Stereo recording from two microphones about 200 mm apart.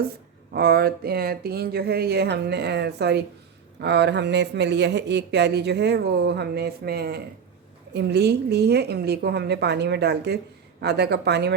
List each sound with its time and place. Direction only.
0.5 s speech: 50° right (ahead or behind)